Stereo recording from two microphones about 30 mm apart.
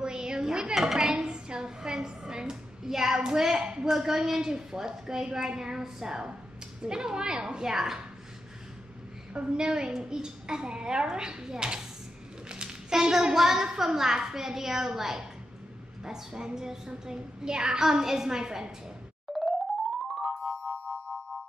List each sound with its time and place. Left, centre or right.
0.0 s a sound: right
0.7 s a sound: centre
2.8 s child singing: centre
3.5 s a sound: right
3.9 s a woman's voice: centre
7.7 s a woman's voice: centre
9.3 s a woman's voice: right
12.4 s a sound: right
13.3 s a woman's voice: centre
16.0 s a woman's voice: right
19.3 s music: centre
20.7 s music: left